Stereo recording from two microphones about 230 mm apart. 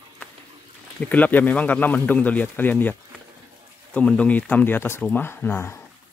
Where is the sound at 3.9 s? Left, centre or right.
Centre.